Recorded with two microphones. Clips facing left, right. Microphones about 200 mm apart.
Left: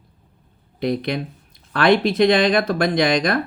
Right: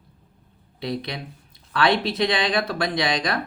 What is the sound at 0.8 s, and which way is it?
Speech, 50° left (ahead or behind).